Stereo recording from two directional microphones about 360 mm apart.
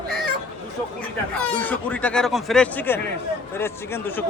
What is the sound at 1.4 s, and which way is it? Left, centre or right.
A man's voice, centre.